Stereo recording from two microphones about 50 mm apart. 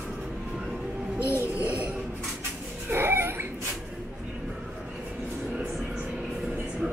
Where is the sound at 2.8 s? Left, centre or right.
Right.